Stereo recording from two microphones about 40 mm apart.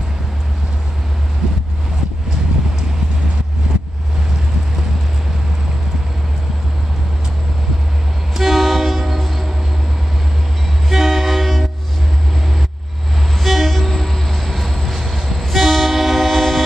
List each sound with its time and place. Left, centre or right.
3.7 s vehicle: right
8.4 s train: centre
10.9 s train: centre
13.4 s train: centre